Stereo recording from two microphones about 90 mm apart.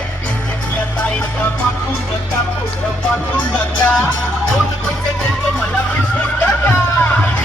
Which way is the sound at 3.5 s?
15° left (ahead or behind).